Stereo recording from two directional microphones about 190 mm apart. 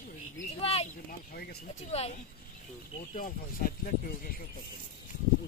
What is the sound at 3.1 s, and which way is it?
Speech, 45° left (ahead or behind).